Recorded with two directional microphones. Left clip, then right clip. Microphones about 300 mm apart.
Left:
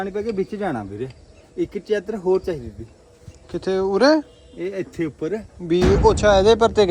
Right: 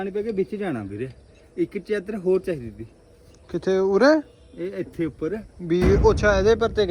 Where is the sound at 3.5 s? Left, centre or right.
Centre.